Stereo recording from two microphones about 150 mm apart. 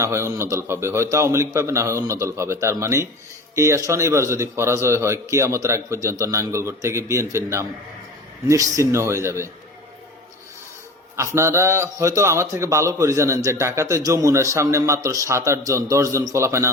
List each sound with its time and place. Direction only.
0.0 s a man's voice: 20° right (ahead or behind)
11.3 s a man's voice: 20° right (ahead or behind)